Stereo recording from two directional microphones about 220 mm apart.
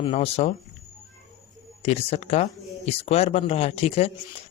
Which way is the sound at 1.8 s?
25° left (ahead or behind).